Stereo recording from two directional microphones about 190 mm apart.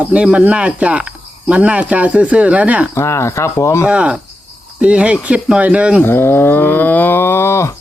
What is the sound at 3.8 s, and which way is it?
Cricket, 5° right (ahead or behind).